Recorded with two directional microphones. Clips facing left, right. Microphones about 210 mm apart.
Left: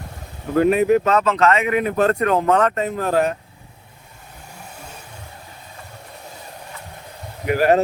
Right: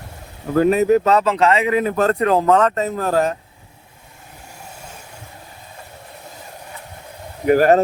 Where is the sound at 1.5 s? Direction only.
30° right (ahead or behind).